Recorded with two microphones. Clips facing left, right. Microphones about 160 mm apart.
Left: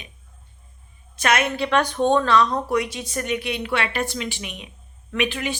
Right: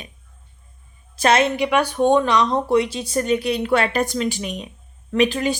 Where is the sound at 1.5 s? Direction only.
15° right (ahead or behind); by 5.5 s 35° right (ahead or behind).